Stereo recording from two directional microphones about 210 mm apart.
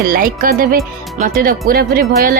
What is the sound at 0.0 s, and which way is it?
A woman's voice, 40° right (ahead or behind).